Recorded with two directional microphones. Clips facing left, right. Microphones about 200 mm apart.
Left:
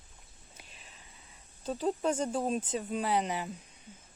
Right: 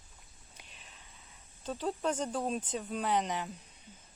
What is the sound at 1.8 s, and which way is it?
Speech, 10° left (ahead or behind).